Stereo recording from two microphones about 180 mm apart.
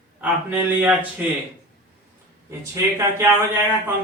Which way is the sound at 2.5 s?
15° right (ahead or behind).